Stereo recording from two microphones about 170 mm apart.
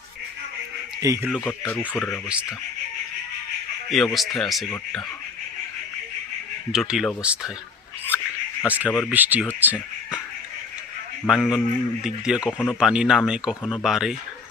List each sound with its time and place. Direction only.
1.0 s speech: 20° right (ahead or behind)
1.3 s speech: 10° left (ahead or behind)
2.2 s speech: 5° right (ahead or behind)
3.9 s speech: centre (ahead or behind)
6.7 s speech: 5° right (ahead or behind)
8.6 s speech: 10° right (ahead or behind)
11.3 s speech: centre (ahead or behind)
12.5 s speech: 5° left (ahead or behind)
12.8 s speech: 5° right (ahead or behind)